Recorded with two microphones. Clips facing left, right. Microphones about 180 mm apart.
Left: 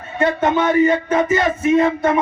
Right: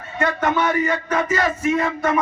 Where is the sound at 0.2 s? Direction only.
25° left (ahead or behind).